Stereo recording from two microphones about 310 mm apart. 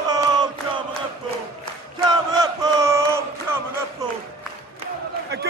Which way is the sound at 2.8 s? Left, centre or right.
Centre.